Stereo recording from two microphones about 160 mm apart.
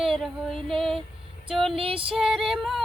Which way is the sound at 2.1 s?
5° right (ahead or behind).